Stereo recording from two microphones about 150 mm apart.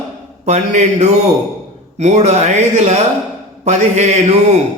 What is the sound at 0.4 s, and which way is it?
Speech, 50° right (ahead or behind).